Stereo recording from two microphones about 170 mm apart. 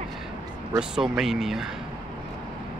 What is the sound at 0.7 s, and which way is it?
Speech, 5° right (ahead or behind).